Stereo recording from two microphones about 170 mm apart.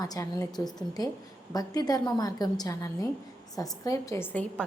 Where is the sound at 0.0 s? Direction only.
20° left (ahead or behind).